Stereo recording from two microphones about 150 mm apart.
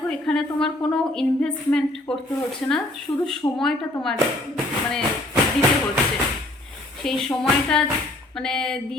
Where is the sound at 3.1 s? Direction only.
30° left (ahead or behind).